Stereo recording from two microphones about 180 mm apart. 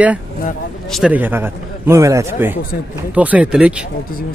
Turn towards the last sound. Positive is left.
turn(degrees=-5)  # may be behind; listen again after turning